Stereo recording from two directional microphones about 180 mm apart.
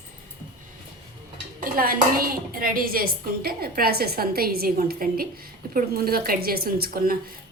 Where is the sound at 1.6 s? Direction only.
55° right (ahead or behind).